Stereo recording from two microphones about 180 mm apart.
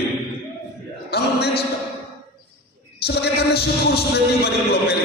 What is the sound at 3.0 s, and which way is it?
A man's voice, 65° left (ahead or behind).